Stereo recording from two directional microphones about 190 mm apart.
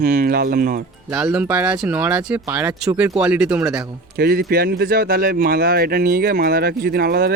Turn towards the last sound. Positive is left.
turn(degrees=-55)  # may be behind; listen again after turning